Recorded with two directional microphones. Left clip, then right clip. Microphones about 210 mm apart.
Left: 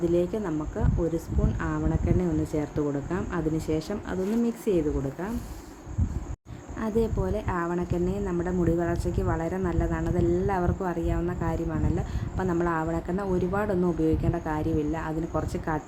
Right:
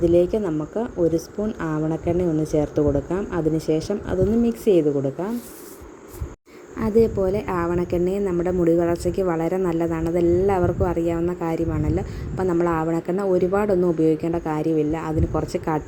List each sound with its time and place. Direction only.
0.0 s a woman's voice: 15° right (ahead or behind)
6.7 s a woman's voice: 20° right (ahead or behind)